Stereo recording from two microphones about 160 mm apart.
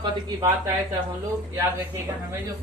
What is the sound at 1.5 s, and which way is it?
Speech, 15° right (ahead or behind).